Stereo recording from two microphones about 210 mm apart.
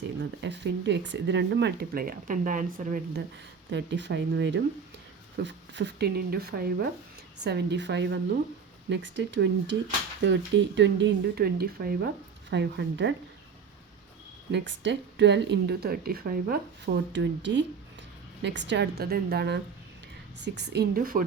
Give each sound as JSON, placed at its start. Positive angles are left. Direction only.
{"t": 0.2, "sound": "speech", "side_deg": -55}
{"t": 3.7, "sound": "speech", "side_deg": -60}
{"t": 12.5, "sound": "speech", "side_deg": -55}
{"t": 14.5, "sound": "speech", "side_deg": -60}